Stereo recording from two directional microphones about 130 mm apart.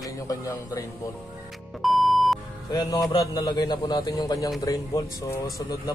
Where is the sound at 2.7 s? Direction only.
30° left (ahead or behind).